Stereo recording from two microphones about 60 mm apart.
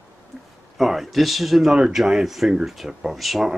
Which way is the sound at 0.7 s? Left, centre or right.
Centre.